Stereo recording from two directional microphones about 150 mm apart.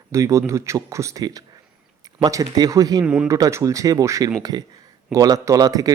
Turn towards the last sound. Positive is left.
turn(degrees=-25)  # may be behind; listen again after turning